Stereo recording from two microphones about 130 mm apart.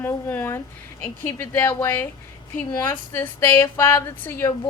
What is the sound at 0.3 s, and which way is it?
Speech, 15° left (ahead or behind).